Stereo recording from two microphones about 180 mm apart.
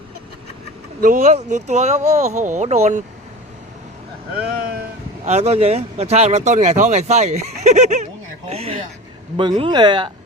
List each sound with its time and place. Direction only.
1.0 s speech: 45° right (ahead or behind)
5.2 s speech: 35° right (ahead or behind)